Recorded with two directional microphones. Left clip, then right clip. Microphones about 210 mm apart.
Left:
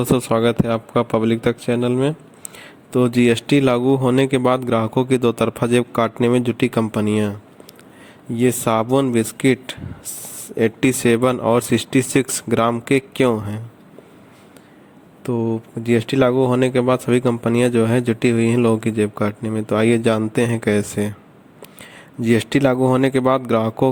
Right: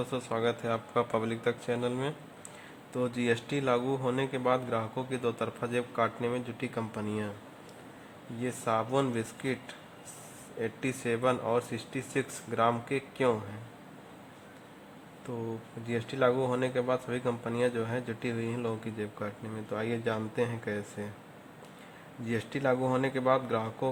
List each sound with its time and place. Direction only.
0.0 s speech: 45° left (ahead or behind)
8.4 s speech: 40° left (ahead or behind)
15.3 s speech: 40° left (ahead or behind)
22.2 s speech: 45° left (ahead or behind)